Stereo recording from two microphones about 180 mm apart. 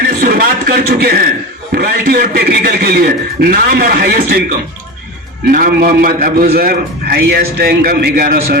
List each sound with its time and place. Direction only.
0.2 s a sound: 55° right (ahead or behind)
1.7 s a man's voice: 55° right (ahead or behind)
5.5 s a man's voice: 55° right (ahead or behind)